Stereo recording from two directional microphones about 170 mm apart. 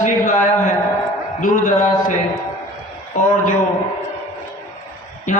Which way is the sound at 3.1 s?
50° left (ahead or behind).